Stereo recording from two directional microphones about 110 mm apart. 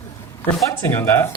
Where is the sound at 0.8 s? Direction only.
20° left (ahead or behind).